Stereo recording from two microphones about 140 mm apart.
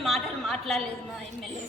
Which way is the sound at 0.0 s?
Centre (ahead or behind).